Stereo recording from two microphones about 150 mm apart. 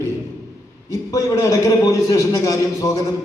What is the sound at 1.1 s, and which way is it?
A man's voice, 25° left (ahead or behind).